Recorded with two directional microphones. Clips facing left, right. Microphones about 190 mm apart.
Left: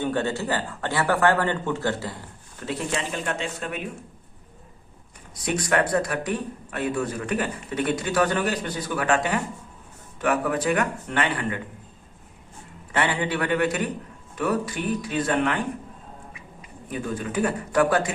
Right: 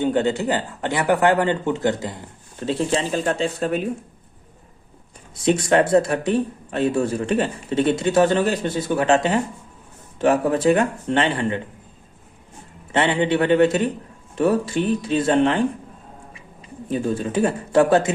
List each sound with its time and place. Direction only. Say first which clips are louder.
0.0 s speech: right 6 dB; 20° right (ahead or behind); by 3.8 s 35° right (ahead or behind)
5.3 s speech: right 7 dB; 25° right (ahead or behind)
12.9 s a man's voice: right 6 dB; 25° right (ahead or behind)